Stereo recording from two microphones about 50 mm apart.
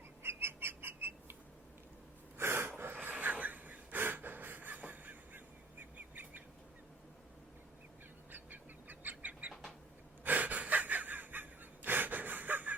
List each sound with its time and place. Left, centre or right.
0.2 s bird: right
2.4 s a sound: right
2.6 s pant: right
6.0 s bird: right
8.3 s duck: right
9.5 s bird: centre
10.2 s gasp: right